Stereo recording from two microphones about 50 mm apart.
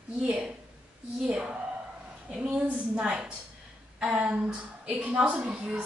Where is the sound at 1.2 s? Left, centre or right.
Right.